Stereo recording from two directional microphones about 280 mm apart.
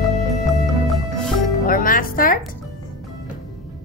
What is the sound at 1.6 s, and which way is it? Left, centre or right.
Music, left.